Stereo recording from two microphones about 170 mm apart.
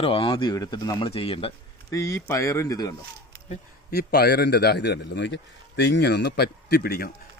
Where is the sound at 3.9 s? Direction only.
70° left (ahead or behind).